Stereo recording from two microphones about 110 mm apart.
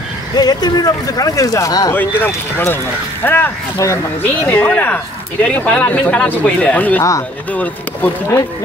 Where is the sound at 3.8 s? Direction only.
30° left (ahead or behind).